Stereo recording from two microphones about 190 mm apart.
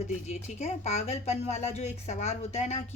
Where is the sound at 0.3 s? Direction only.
35° left (ahead or behind).